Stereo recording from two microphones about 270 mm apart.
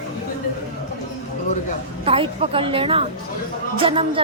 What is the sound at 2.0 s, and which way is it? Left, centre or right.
A woman's voice, right.